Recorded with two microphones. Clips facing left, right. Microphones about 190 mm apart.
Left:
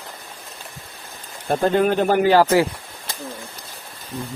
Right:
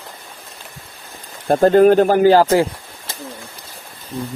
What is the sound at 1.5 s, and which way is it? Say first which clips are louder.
Speech: right 7 dB; 40° right (ahead or behind).